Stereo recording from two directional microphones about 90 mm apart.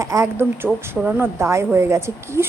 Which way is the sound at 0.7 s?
Centre (ahead or behind).